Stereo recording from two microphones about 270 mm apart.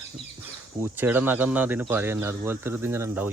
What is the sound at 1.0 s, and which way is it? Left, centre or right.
Speech, centre.